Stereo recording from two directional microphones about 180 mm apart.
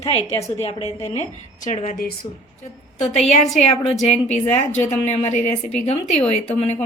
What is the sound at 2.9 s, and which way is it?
A woman's voice, 40° left (ahead or behind).